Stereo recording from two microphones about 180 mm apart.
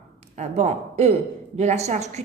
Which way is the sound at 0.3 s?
35° right (ahead or behind).